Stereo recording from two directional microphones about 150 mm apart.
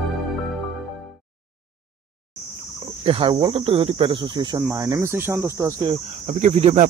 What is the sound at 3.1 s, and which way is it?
Speech, 35° right (ahead or behind).